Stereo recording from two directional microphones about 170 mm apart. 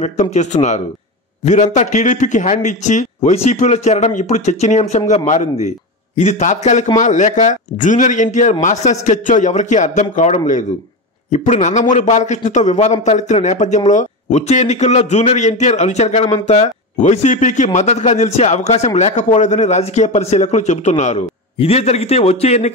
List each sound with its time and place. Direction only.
0.0 s speech: 40° left (ahead or behind)